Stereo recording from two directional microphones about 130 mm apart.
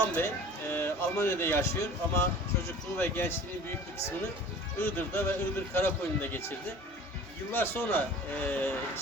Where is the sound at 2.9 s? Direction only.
15° left (ahead or behind).